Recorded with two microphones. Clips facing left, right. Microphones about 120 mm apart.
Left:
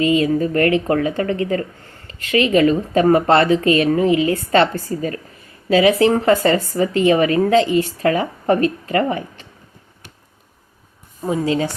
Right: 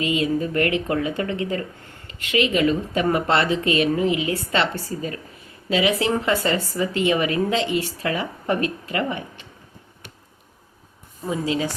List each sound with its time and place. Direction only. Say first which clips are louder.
0.0 s a woman's voice: left 6 dB; 35° left (ahead or behind)
11.3 s a woman's voice: left 5 dB; 35° left (ahead or behind)